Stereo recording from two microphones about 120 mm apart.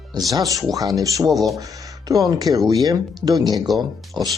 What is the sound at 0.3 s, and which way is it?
Speech, 30° right (ahead or behind).